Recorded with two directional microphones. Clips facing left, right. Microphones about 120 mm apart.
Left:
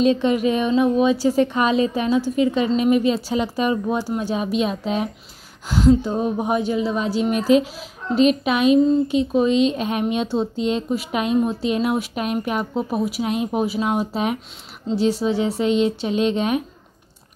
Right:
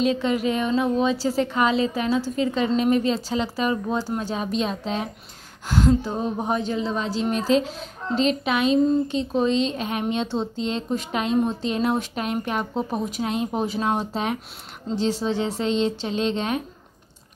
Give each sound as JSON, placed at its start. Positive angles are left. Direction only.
{"t": 0.0, "sound": "a woman's voice", "side_deg": 20}